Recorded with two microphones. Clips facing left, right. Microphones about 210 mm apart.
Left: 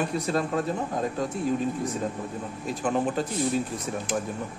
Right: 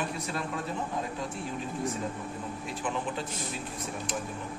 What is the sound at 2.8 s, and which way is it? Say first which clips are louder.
Speech: left 8 dB; 45° left (ahead or behind).